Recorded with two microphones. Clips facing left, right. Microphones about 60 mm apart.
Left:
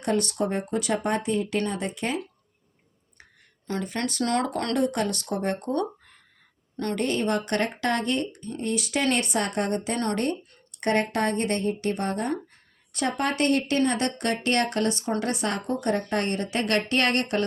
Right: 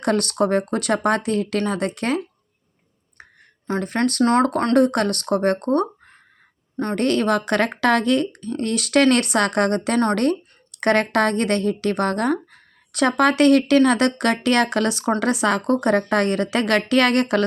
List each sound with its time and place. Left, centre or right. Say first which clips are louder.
0.0 s speech: right 5 dB; right
3.8 s speech: right 8 dB; right
4.2 s speech: right 8 dB; right
4.7 s speech: right 7 dB; right
6.9 s a woman's voice: right 6 dB; right